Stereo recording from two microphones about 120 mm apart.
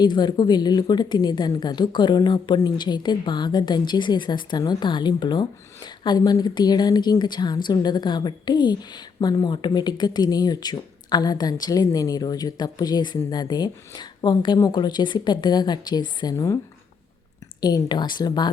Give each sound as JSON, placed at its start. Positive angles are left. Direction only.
{"t": 0.0, "sound": "a woman's voice", "side_deg": 40}
{"t": 17.6, "sound": "a woman's voice", "side_deg": 35}